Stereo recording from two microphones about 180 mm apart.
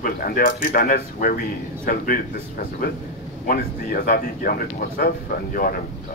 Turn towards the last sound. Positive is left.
turn(degrees=55)  # may be behind; listen again after turning